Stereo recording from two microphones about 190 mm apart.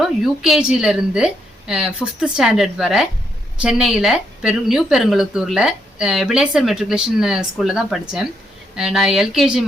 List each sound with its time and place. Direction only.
0.0 s a woman's voice: centre (ahead or behind)